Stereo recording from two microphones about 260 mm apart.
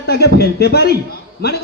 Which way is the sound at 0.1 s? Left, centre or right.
Left.